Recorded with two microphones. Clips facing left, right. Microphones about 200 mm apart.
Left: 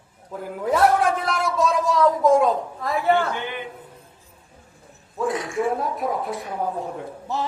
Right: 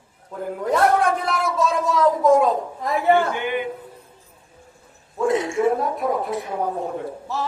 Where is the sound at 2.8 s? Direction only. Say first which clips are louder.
Right 4 dB; 15° right (ahead or behind).